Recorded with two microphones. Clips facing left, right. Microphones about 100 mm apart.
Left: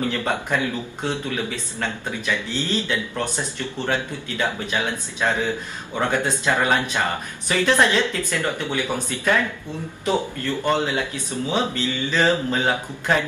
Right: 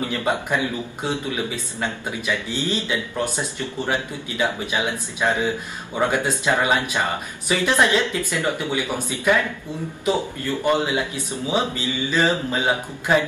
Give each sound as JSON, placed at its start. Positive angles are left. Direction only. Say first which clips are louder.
{"t": 0.1, "sound": "speech", "louder": "right 1 dB", "side_deg": -10}
{"t": 10.6, "sound": "speech", "louder": "right 1 dB", "side_deg": -15}